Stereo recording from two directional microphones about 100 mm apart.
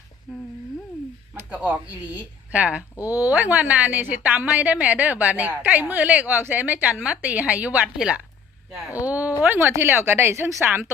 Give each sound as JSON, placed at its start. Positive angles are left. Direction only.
{"t": 1.5, "sound": "a woman's voice", "side_deg": -15}